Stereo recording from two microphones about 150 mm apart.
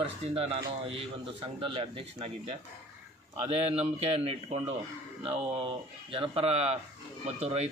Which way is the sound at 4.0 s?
45° right (ahead or behind).